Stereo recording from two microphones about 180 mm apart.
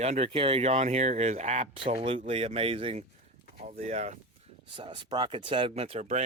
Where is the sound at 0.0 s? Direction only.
35° right (ahead or behind).